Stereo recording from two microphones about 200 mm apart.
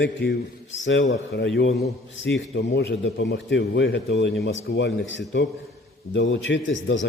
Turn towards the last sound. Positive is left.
turn(degrees=70)  # may be behind; listen again after turning